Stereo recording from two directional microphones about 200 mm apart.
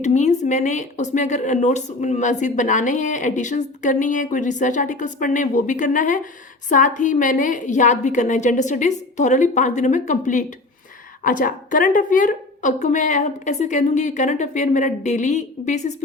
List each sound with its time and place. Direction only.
0.0 s speech: 35° left (ahead or behind)